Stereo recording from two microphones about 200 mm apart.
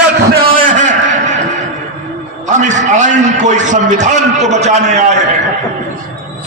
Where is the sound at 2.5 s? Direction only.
35° right (ahead or behind).